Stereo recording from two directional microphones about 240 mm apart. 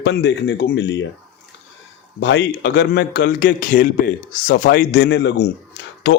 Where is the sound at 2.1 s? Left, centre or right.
Left.